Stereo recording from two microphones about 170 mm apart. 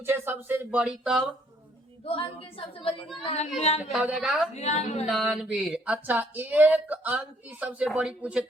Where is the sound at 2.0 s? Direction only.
35° left (ahead or behind).